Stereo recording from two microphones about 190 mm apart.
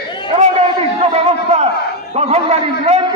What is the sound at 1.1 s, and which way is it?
A man's voice, 35° right (ahead or behind).